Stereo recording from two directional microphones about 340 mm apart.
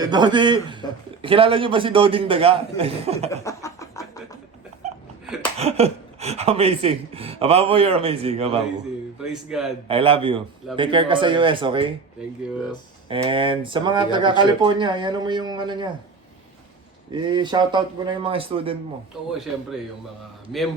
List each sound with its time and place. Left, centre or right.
0.0 s speech: centre
3.4 s a sound: centre
5.2 s a sound: centre
5.5 s speech: centre
9.2 s speech: centre
9.9 s speech: centre
13.1 s speech: centre
17.1 s speech: centre